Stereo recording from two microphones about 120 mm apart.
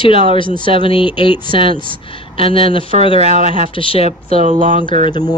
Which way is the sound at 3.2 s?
85° right.